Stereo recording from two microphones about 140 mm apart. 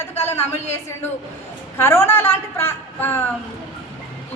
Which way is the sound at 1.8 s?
15° left (ahead or behind).